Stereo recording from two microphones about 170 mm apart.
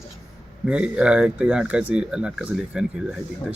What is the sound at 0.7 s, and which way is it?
Speech, 5° right (ahead or behind).